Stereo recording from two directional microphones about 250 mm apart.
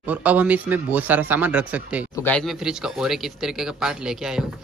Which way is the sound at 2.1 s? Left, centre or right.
Centre.